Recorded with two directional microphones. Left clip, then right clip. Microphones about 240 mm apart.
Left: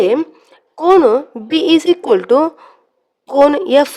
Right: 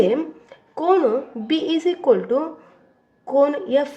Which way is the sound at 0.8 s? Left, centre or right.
Left.